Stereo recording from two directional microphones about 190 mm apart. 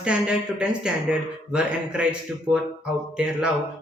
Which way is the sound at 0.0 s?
5° right (ahead or behind).